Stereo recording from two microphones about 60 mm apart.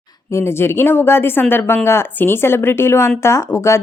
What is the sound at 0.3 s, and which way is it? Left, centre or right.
Speech, left.